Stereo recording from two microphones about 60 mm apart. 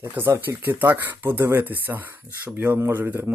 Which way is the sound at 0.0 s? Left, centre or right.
Right.